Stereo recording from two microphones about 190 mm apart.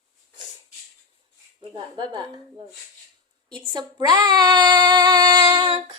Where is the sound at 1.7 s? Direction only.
25° right (ahead or behind).